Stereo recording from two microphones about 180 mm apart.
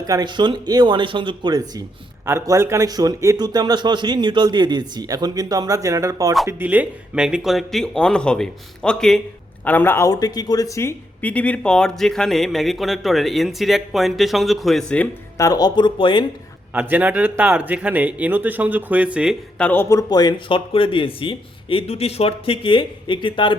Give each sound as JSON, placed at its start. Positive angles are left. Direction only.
{"t": 0.0, "sound": "a man's voice", "side_deg": -20}
{"t": 15.4, "sound": "speech", "side_deg": 20}
{"t": 16.7, "sound": "speech", "side_deg": -10}
{"t": 19.5, "sound": "speech", "side_deg": 10}